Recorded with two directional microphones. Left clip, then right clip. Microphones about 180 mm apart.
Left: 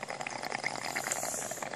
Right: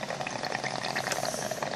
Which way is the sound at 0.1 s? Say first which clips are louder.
Right 3 dB; 20° left (ahead or behind).